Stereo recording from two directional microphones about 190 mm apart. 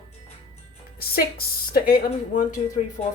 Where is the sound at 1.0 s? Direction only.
55° left (ahead or behind).